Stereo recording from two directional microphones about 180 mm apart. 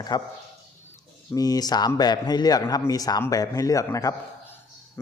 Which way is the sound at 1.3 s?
20° left (ahead or behind).